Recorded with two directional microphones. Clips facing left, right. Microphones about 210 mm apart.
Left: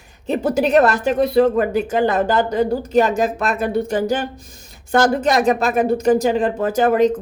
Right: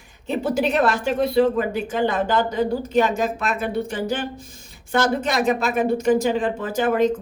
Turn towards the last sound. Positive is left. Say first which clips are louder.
# left 4 dB
turn(degrees=40)  # may be behind; listen again after turning